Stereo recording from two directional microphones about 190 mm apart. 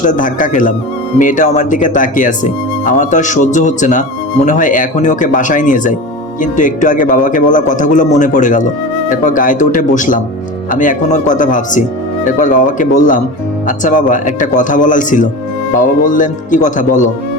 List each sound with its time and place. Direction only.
0.0 s a man's voice: 45° left (ahead or behind)